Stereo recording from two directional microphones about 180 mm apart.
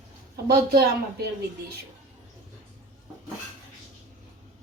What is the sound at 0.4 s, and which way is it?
Speech, 60° right (ahead or behind).